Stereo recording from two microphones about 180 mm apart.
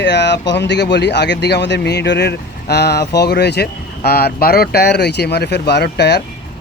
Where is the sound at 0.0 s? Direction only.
75° left (ahead or behind).